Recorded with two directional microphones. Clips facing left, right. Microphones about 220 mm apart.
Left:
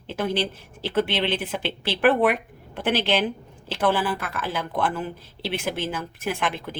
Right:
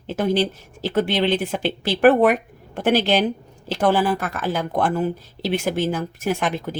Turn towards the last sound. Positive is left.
turn(degrees=-40)  # may be behind; listen again after turning